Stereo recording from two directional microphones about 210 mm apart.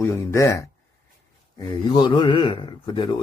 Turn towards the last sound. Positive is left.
turn(degrees=20)  # may be behind; listen again after turning